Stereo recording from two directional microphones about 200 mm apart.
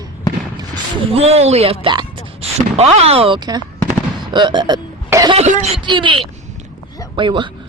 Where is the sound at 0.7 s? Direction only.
30° right (ahead or behind).